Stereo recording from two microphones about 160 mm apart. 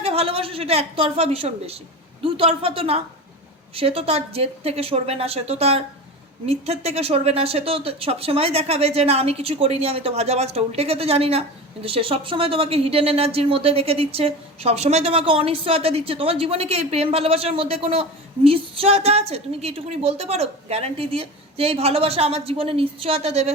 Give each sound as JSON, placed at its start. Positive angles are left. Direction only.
{"t": 0.0, "sound": "a woman's voice", "side_deg": -40}